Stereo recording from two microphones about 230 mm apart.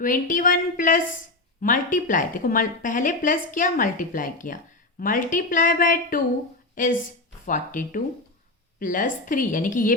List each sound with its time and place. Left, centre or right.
0.0 s a woman's voice: left